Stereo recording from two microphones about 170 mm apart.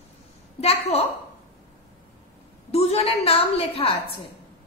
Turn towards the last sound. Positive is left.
turn(degrees=35)  # may be behind; listen again after turning